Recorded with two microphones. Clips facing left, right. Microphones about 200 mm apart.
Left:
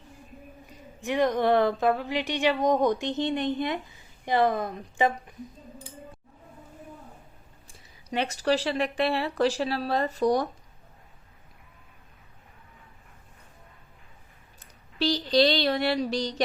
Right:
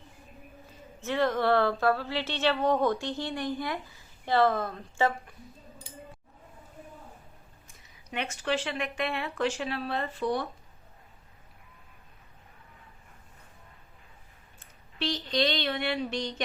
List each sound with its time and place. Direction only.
0.7 s a woman's voice: 15° left (ahead or behind)
7.7 s speech: 35° left (ahead or behind)
14.6 s speech: 35° left (ahead or behind)